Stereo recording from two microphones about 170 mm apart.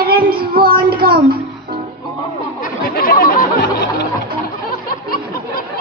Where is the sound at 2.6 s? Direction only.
60° left (ahead or behind).